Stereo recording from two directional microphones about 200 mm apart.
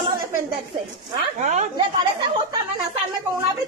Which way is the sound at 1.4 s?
35° right (ahead or behind).